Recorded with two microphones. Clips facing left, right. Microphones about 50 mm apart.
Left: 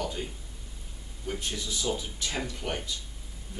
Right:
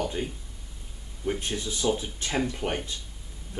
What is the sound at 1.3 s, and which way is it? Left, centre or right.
Speech, right.